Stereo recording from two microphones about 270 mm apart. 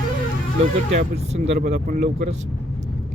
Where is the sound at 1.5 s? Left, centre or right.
Right.